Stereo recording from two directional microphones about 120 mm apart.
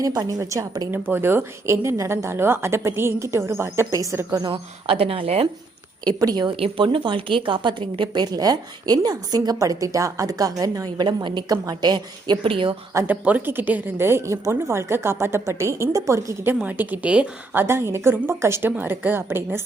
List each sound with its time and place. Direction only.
0.0 s a woman's voice: 30° right (ahead or behind)
0.9 s a woman's voice: 15° right (ahead or behind)
4.5 s a woman's voice: 50° right (ahead or behind)
6.1 s a woman's voice: 35° right (ahead or behind)
6.6 s a woman's voice: 45° right (ahead or behind)
13.1 s a woman's voice: 15° right (ahead or behind)